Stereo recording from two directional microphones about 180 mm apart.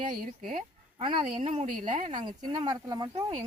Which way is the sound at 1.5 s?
45° right (ahead or behind).